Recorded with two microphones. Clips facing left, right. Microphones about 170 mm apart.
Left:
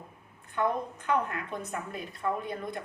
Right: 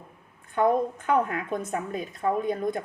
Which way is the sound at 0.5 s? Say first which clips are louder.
Right 7 dB; 45° right (ahead or behind).